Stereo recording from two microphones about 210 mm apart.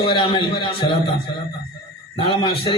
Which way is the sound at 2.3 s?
25° left (ahead or behind).